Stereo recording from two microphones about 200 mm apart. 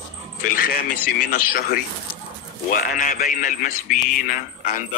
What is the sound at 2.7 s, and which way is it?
A man's voice, 45° left (ahead or behind).